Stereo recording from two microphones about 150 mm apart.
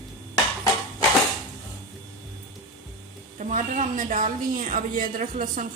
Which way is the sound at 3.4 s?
55° right (ahead or behind).